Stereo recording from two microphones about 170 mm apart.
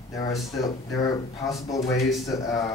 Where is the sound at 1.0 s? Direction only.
20° left (ahead or behind).